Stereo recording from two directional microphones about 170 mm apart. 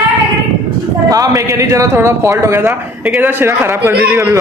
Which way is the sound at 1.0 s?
20° right (ahead or behind).